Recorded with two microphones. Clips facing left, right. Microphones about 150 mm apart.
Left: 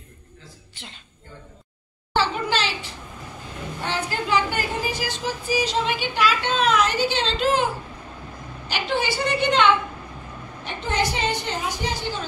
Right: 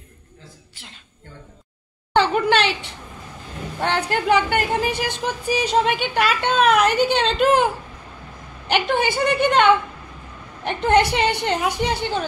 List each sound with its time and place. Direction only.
2.5 s a sound: 60° right (ahead or behind)
3.8 s a woman's voice: 60° right (ahead or behind)
8.6 s a woman's voice: 55° right (ahead or behind)